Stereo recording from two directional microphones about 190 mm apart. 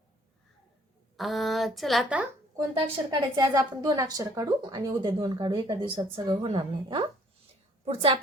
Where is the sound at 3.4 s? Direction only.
20° right (ahead or behind).